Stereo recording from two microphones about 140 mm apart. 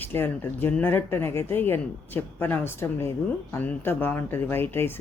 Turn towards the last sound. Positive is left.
turn(degrees=15)  # may be behind; listen again after turning